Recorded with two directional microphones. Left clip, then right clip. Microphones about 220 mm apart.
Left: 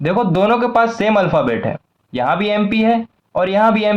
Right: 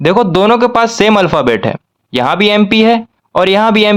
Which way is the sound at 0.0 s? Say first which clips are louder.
Right 6 dB; 35° right (ahead or behind).